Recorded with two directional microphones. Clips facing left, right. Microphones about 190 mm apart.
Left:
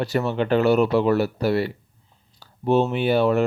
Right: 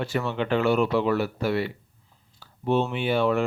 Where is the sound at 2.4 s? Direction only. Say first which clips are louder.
Left 4 dB; 40° left (ahead or behind).